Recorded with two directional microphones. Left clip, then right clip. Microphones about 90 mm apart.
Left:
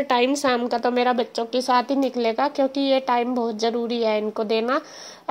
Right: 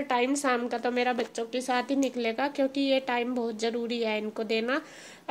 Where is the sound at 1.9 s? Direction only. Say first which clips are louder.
Left 7 dB; 20° left (ahead or behind).